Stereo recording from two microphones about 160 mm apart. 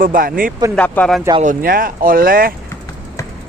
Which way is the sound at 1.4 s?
65° right (ahead or behind).